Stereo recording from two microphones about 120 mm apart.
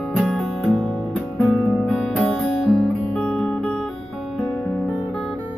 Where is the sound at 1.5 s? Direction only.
15° left (ahead or behind).